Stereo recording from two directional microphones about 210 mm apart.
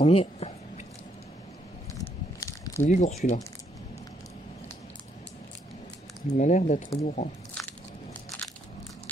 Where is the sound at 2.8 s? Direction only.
35° left (ahead or behind).